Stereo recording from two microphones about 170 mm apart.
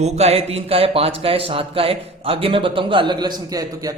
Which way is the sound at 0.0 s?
40° right (ahead or behind).